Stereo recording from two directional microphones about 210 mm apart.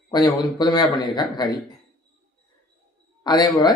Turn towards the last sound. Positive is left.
turn(degrees=20)  # may be behind; listen again after turning